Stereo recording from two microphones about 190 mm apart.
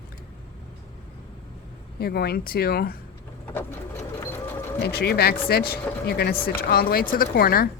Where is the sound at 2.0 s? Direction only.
55° left (ahead or behind).